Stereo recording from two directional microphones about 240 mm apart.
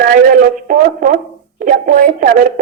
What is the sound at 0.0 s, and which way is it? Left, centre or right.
A woman's voice, right.